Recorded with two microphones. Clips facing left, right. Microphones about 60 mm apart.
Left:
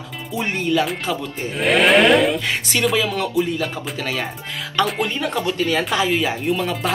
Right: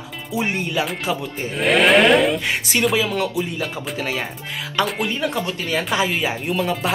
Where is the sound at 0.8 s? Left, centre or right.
Centre.